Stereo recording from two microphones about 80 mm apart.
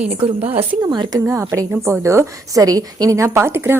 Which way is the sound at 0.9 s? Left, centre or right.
Right.